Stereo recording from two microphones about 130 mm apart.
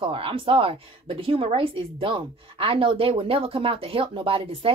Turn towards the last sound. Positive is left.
turn(degrees=-45)  # may be behind; listen again after turning